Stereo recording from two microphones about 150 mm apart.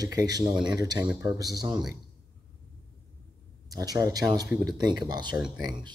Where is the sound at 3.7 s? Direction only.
25° right (ahead or behind).